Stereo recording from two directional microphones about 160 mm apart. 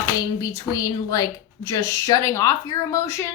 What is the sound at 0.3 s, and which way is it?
A woman's voice, 20° left (ahead or behind).